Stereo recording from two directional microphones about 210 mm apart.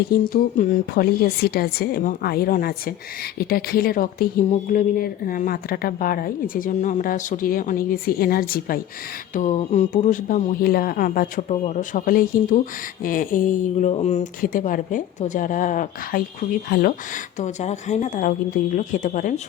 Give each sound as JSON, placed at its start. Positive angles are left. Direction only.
{"t": 0.1, "sound": "speech", "side_deg": 40}
{"t": 17.3, "sound": "speech", "side_deg": 35}